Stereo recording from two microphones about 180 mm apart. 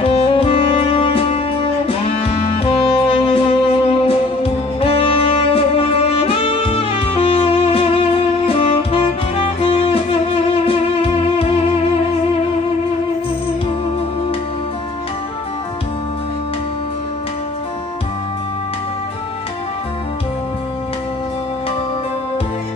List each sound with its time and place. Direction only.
0.0 s music: 30° left (ahead or behind)
8.5 s saxophone: 30° left (ahead or behind)